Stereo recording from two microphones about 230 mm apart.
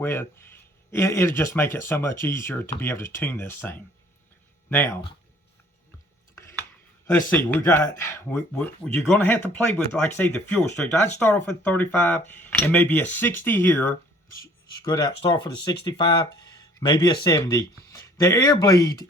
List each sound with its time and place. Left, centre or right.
0.0 s speech: centre
6.3 s a sound: centre
7.3 s speech: centre